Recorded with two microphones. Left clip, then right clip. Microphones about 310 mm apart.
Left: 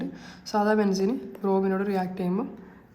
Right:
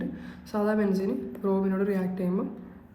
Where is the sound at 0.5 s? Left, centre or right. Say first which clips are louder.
Left 3 dB; centre.